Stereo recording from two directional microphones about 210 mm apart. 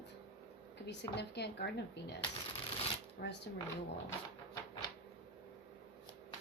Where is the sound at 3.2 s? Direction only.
50° left (ahead or behind).